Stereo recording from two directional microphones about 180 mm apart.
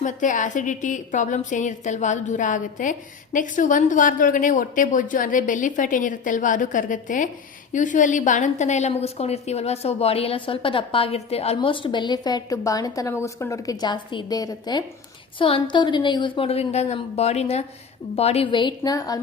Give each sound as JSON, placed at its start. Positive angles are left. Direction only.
{"t": 0.0, "sound": "a woman's voice", "side_deg": 45}